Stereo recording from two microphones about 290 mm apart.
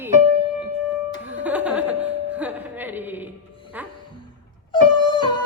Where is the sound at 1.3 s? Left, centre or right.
Centre.